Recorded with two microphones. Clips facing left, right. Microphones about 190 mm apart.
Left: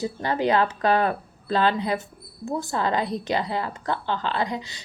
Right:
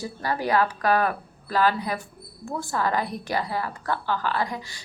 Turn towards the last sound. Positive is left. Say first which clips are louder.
# left 1 dB
turn(degrees=20)  # may be behind; listen again after turning